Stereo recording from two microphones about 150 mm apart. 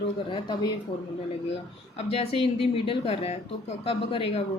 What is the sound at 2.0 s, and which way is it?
Speech, 40° left (ahead or behind).